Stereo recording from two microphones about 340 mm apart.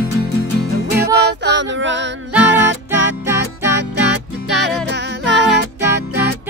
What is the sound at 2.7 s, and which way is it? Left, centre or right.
Music, right.